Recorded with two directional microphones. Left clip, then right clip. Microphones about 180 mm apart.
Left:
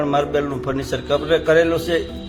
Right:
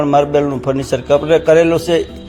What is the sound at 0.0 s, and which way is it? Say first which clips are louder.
Speech: right 7 dB; 25° right (ahead or behind).